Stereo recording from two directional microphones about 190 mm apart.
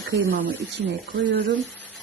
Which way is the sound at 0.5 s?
65° right (ahead or behind).